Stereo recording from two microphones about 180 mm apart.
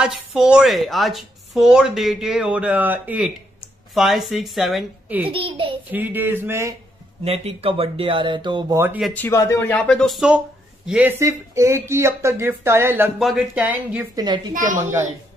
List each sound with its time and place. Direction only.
0.0 s speech: 5° right (ahead or behind)
5.3 s speech: 30° right (ahead or behind)
5.9 s speech: 10° right (ahead or behind)
7.2 s speech: 35° right (ahead or behind)
8.7 s speech: 10° right (ahead or behind)
9.0 s speech: 10° left (ahead or behind); by 14.0 s 5° right (ahead or behind)
14.1 s speech: 25° right (ahead or behind)